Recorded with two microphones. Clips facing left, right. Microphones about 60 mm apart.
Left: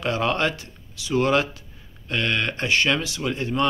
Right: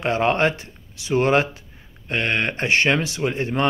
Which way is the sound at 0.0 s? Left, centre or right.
Right.